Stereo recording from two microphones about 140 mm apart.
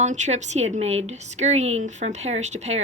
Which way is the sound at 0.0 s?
55° right (ahead or behind).